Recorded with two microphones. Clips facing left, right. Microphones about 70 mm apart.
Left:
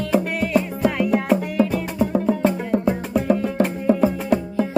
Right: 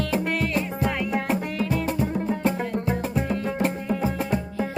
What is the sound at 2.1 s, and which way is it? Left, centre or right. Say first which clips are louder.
Music: left 5 dB; left.